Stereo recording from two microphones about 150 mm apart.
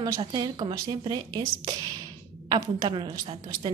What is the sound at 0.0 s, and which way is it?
A woman's voice, 30° right (ahead or behind).